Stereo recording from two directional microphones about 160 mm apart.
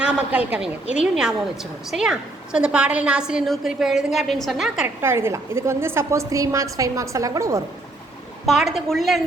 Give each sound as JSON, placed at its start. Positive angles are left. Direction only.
{"t": 0.0, "sound": "a woman's voice", "side_deg": -10}
{"t": 5.0, "sound": "a woman's voice", "side_deg": -15}
{"t": 8.4, "sound": "a woman's voice", "side_deg": 0}